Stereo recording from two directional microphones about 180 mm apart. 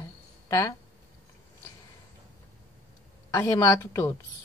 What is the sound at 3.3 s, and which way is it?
Speech, 20° left (ahead or behind).